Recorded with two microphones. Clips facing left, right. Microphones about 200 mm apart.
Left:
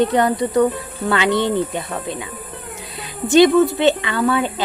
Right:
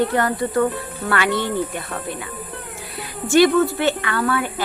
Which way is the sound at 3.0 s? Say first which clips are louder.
Left 3 dB; 20° left (ahead or behind).